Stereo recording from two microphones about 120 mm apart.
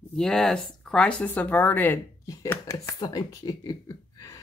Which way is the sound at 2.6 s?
25° left (ahead or behind).